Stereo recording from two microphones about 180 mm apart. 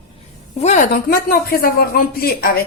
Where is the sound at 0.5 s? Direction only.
40° left (ahead or behind).